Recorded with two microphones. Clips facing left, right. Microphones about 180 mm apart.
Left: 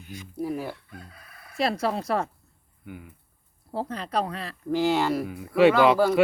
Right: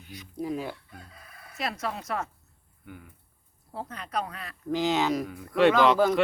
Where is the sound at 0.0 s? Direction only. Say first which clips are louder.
Left 4 dB; 50° left (ahead or behind).